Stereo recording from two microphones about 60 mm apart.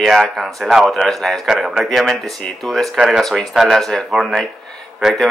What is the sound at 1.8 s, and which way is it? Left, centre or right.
Speech, centre.